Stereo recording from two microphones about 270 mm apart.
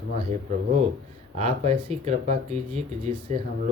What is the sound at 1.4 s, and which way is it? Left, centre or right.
Speech, right.